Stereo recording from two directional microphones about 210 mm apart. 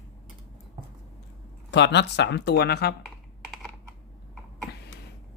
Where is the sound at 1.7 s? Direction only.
55° left (ahead or behind).